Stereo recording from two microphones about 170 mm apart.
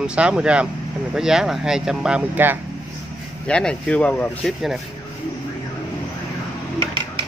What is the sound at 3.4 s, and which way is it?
Speech, 5° left (ahead or behind).